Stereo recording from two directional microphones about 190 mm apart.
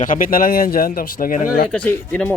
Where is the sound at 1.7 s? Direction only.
10° left (ahead or behind).